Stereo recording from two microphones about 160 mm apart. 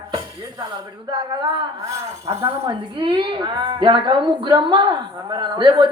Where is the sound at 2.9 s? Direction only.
30° right (ahead or behind).